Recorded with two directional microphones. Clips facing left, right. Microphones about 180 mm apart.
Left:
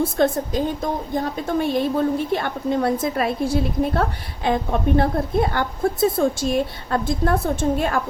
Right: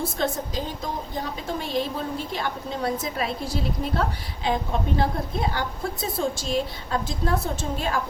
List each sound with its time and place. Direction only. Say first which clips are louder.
0.0 s a woman's voice: left 7 dB; 55° left (ahead or behind)